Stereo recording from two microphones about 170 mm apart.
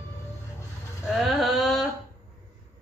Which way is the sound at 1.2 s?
Centre (ahead or behind).